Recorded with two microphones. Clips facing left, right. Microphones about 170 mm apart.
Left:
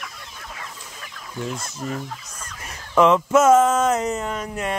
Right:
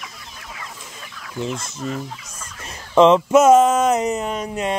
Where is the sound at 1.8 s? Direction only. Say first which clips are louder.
Right 2 dB; 15° left (ahead or behind).